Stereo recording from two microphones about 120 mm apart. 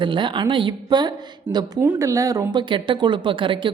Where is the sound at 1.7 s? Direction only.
25° right (ahead or behind).